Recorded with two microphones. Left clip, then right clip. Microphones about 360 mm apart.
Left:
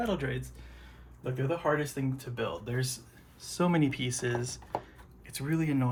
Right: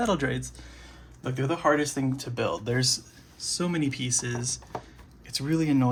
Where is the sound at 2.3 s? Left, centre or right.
Centre.